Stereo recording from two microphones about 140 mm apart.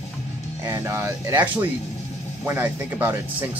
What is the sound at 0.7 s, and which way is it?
Speech, 20° right (ahead or behind).